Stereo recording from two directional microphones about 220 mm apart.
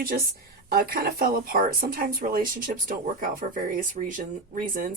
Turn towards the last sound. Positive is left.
turn(degrees=-40)  # may be behind; listen again after turning